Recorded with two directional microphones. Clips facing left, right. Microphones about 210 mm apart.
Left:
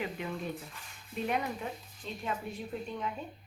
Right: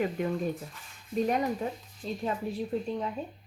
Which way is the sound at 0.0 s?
45° right (ahead or behind).